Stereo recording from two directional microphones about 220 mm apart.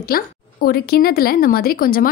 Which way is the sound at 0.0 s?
45° left (ahead or behind).